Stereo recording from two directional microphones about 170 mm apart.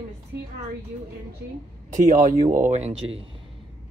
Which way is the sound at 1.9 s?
50° right (ahead or behind).